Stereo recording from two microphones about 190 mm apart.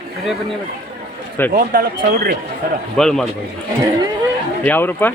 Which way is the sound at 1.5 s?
50° right (ahead or behind).